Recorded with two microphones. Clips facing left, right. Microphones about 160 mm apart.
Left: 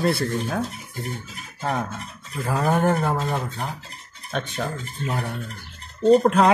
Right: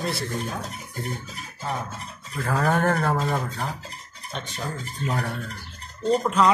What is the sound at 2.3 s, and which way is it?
Speech, 10° left (ahead or behind).